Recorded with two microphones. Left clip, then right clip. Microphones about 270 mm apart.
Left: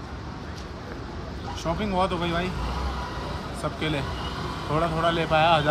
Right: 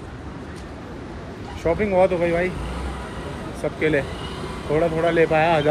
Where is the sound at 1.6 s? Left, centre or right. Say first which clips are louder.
Right 8 dB; centre.